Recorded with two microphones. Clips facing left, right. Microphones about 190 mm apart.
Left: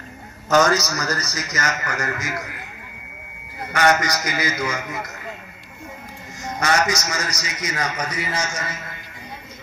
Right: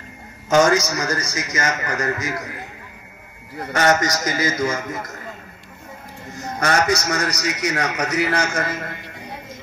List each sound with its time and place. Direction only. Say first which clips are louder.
0.8 s a man's voice: right 2 dB; 25° right (ahead or behind)
3.7 s a man's voice: right 1 dB; 40° right (ahead or behind)
6.6 s a man's voice: right 2 dB; 60° right (ahead or behind)